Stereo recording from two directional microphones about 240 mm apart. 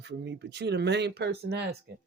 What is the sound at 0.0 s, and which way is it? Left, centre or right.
Speech, right.